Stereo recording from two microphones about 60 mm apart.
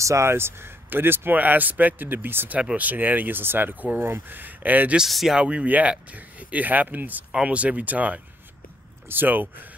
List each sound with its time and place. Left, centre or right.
0.0 s speech: right
5.1 s speech: centre
5.4 s speech: centre